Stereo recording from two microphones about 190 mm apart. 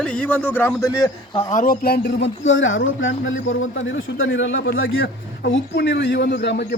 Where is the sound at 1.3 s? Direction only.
45° left (ahead or behind); by 5.0 s 90° left.